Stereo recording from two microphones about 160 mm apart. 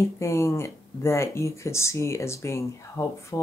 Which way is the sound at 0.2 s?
20° left (ahead or behind).